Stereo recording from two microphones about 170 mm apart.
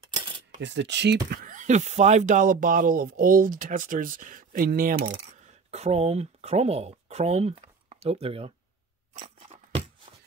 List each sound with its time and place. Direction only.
0.6 s speech: 90° right; by 5.1 s 55° right (ahead or behind)
5.7 s speech: 40° right (ahead or behind)